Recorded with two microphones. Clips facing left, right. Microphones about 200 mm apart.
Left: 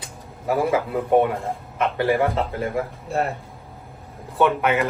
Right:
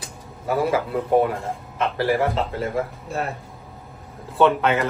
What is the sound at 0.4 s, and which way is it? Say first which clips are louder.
A man's voice: left 1 dB; 20° left (ahead or behind).